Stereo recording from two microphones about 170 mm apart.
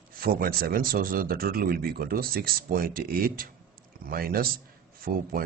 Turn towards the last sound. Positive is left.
turn(degrees=-60)  # may be behind; listen again after turning